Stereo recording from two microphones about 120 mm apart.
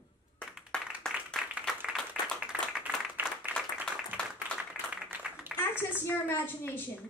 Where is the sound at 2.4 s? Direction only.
5° right (ahead or behind).